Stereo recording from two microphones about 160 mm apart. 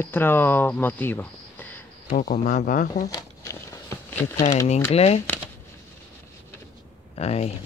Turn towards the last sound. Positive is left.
turn(degrees=40)  # may be behind; listen again after turning